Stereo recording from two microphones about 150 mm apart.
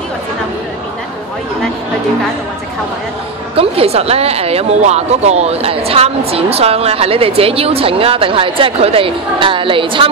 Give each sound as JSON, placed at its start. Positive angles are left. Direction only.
{"t": 3.5, "sound": "a woman's voice", "side_deg": -40}